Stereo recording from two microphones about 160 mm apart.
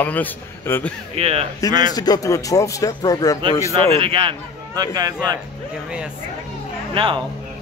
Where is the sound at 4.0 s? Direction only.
35° right (ahead or behind).